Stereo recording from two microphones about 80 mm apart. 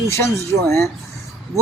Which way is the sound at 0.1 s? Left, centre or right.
Left.